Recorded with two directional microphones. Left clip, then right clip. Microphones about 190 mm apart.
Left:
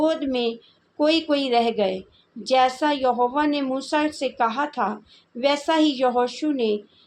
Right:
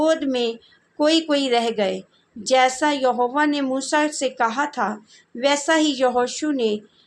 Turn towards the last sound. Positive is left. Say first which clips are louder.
# right 1 dB
turn(degrees=-20)  # may be behind; listen again after turning